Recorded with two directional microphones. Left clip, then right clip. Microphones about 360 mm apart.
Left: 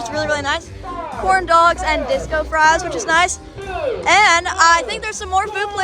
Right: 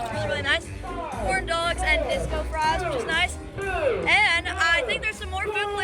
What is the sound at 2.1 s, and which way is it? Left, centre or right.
Speech, left.